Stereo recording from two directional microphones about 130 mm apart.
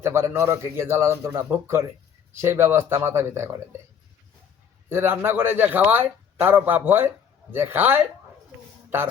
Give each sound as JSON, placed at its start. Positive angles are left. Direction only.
{"t": 0.0, "sound": "a man's voice", "side_deg": -20}
{"t": 4.9, "sound": "speech", "side_deg": -20}